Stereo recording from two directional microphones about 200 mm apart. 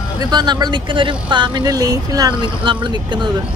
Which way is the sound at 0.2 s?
20° right (ahead or behind).